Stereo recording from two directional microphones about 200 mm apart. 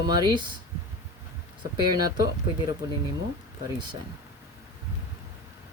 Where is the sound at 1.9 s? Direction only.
20° right (ahead or behind).